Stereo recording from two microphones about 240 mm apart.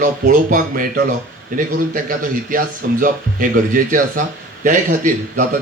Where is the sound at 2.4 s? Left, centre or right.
Right.